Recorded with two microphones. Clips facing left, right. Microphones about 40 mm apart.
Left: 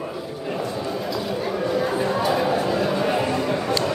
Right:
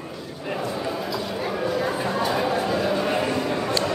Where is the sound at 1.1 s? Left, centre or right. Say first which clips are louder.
Left 2 dB; centre.